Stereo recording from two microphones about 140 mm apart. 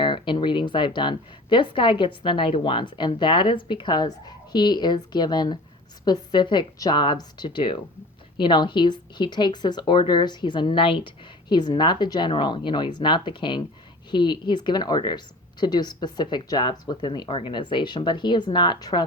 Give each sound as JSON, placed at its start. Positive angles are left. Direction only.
{"t": 0.0, "sound": "speech", "side_deg": 35}